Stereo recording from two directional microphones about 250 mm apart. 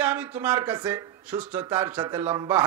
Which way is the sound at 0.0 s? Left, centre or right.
Centre.